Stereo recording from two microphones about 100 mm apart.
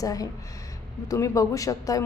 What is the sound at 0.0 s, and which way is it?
Speech, 35° left (ahead or behind).